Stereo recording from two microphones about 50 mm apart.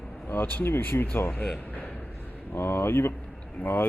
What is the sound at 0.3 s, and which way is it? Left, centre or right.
Speech, left.